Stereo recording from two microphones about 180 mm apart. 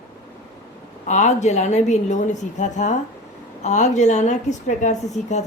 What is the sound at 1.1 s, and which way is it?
Speech, 40° left (ahead or behind).